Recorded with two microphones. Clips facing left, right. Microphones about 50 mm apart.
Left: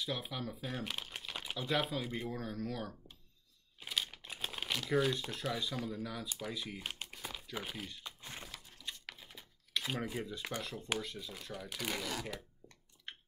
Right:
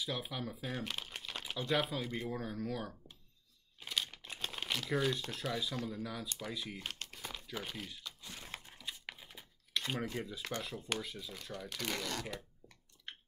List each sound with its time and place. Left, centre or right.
0.0 s speech: centre
3.8 s crumpling: centre
7.5 s speech: centre
8.0 s a sound: left
8.7 s computer keyboard: centre
11.0 s speech: centre